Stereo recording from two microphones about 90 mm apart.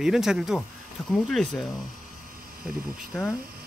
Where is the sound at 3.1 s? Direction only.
10° left (ahead or behind).